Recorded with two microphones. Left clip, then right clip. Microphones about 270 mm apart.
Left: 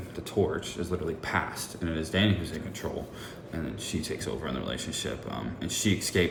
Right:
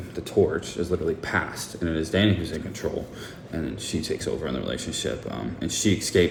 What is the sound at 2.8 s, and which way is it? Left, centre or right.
Speech, right.